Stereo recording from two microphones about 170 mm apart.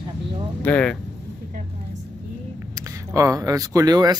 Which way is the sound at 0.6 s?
5° left (ahead or behind).